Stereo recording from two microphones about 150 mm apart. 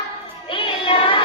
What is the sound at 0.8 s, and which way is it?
Child singing, 35° left (ahead or behind).